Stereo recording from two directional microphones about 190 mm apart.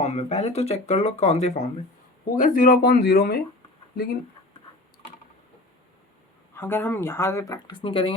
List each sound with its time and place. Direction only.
0.0 s speech: 35° left (ahead or behind)
2.3 s speech: 45° left (ahead or behind)
6.5 s speech: 10° left (ahead or behind); by 8.1 s 30° left (ahead or behind)